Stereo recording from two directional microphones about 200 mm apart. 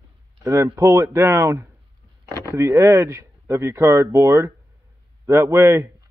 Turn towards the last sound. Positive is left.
turn(degrees=-15)  # may be behind; listen again after turning